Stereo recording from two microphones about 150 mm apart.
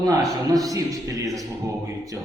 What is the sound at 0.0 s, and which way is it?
A man's voice, 25° right (ahead or behind).